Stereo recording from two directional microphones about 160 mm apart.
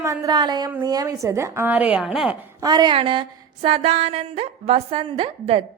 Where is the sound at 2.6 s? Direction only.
25° right (ahead or behind).